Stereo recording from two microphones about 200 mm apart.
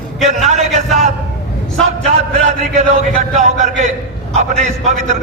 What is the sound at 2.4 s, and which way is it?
A man's voice, 35° right (ahead or behind).